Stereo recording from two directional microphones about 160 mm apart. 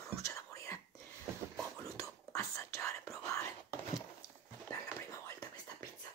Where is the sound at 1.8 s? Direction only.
20° left (ahead or behind).